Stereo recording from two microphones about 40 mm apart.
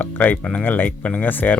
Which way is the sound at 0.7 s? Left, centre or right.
Left.